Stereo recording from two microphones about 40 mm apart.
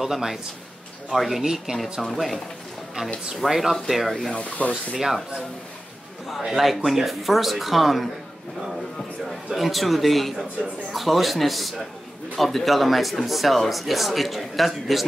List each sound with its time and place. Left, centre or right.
0.0 s a man's voice: centre
2.1 s speech: centre
3.4 s speech: centre
4.4 s speech: left
4.9 s a man's voice: centre
6.5 s speech: centre
9.5 s speech: centre